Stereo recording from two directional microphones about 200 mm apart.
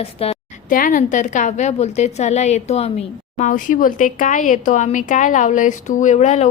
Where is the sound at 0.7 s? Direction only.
45° left (ahead or behind).